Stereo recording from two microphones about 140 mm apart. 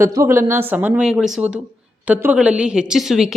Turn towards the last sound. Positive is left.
turn(degrees=0)  # may be behind; listen again after turning